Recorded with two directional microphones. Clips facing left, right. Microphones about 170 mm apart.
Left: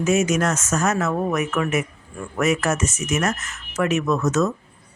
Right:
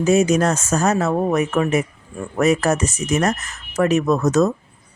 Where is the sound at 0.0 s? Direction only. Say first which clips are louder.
Right 4 dB; 35° right (ahead or behind).